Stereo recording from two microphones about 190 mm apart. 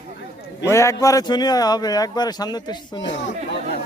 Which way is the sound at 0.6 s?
15° left (ahead or behind).